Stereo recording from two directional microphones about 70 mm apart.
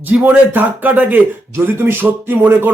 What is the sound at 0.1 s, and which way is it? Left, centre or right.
Speech, right.